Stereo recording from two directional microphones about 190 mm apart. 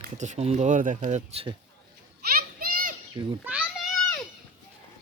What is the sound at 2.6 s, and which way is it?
Children playing, 45° right (ahead or behind).